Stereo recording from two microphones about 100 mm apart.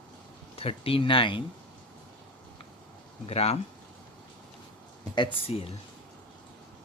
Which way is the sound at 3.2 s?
90° left.